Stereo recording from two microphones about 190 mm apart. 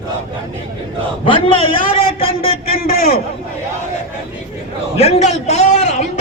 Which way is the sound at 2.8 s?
55° left (ahead or behind).